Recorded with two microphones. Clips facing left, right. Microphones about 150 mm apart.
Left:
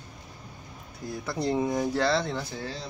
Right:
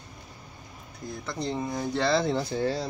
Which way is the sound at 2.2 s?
15° right (ahead or behind).